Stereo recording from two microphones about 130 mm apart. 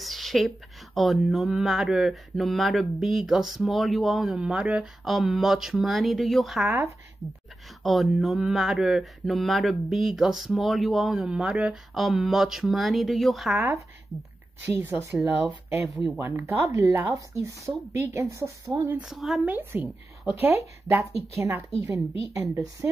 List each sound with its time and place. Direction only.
0.0 s a sound: centre (ahead or behind)
0.9 s speech: centre (ahead or behind)
7.8 s speech: centre (ahead or behind)
14.8 s speech: 20° right (ahead or behind)
15.9 s speech: centre (ahead or behind)
16.2 s speech: 20° right (ahead or behind)
18.9 s speech: centre (ahead or behind)
19.4 s speech: 15° right (ahead or behind)